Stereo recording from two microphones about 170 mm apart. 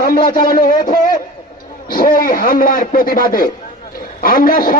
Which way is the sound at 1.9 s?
55° left (ahead or behind).